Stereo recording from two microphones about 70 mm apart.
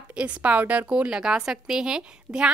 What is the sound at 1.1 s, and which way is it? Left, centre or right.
A woman's voice, centre.